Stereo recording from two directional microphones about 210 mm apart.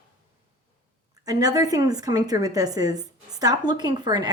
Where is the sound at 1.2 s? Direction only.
20° right (ahead or behind).